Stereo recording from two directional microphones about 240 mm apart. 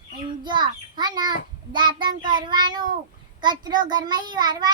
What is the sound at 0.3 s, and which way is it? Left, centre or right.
A child's voice, centre.